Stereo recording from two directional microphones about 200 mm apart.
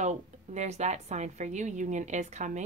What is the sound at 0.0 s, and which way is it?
Speech, 35° right (ahead or behind).